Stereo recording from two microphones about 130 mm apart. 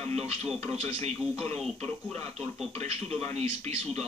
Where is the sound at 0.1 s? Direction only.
50° right (ahead or behind).